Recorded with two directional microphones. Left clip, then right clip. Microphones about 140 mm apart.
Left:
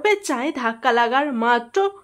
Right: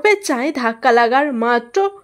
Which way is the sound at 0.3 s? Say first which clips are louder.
Right 4 dB; 25° right (ahead or behind).